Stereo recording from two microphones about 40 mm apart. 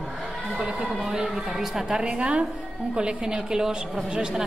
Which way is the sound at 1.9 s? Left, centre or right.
Right.